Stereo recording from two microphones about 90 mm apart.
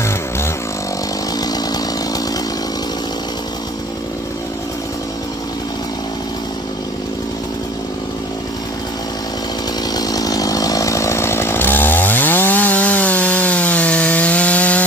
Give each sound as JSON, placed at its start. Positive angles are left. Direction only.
{"t": 9.9, "sound": "chainsaw", "side_deg": 45}